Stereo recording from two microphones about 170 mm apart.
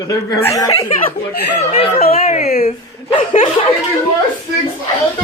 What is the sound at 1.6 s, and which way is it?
Speech, 35° left (ahead or behind).